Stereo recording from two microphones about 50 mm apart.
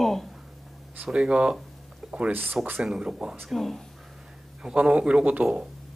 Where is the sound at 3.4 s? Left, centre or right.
Centre.